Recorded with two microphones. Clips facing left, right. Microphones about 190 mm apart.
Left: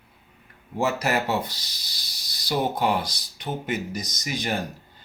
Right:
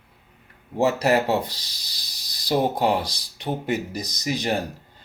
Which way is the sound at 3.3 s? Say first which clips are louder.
Right 3 dB; 35° right (ahead or behind).